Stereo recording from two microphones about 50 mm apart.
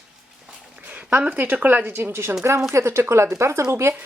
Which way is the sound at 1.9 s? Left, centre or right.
Right.